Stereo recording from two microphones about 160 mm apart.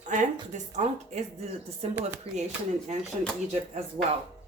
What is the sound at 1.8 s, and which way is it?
Speech, 40° right (ahead or behind).